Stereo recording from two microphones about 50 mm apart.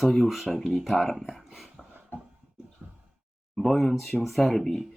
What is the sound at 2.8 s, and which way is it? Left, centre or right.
Sigh, right.